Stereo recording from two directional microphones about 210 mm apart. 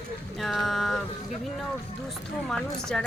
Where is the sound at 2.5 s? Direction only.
5° left (ahead or behind).